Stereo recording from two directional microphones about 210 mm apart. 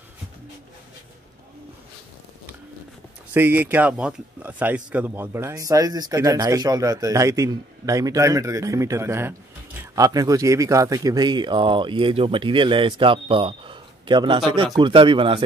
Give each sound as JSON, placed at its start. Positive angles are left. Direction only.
{"t": 3.3, "sound": "speech", "side_deg": -10}